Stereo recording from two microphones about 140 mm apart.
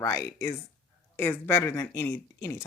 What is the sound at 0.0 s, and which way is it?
Speech, 20° left (ahead or behind).